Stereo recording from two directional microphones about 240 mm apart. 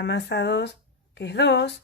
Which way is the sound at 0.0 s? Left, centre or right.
Left.